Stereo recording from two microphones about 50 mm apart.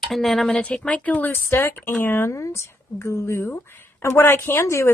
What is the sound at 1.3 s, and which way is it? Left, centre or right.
Speech, left.